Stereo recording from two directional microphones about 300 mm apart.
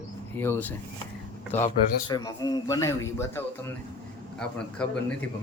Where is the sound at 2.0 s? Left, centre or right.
Centre.